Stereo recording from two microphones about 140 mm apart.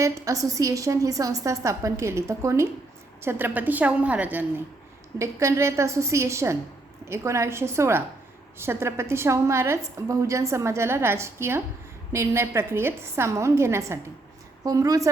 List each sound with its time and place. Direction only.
0.0 s a woman's voice: 25° right (ahead or behind)